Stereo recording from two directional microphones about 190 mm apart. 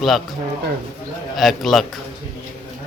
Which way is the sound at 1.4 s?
Centre (ahead or behind).